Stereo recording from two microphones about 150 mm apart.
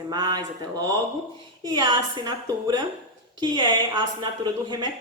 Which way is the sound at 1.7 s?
30° right (ahead or behind).